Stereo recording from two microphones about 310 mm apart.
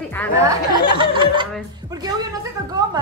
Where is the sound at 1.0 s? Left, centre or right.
Centre.